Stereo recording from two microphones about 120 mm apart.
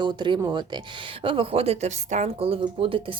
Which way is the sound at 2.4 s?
50° right (ahead or behind).